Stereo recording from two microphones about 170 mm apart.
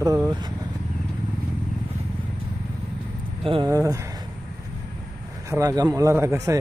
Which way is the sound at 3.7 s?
20° right (ahead or behind).